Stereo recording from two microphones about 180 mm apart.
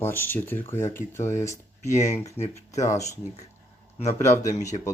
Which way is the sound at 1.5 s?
40° left (ahead or behind).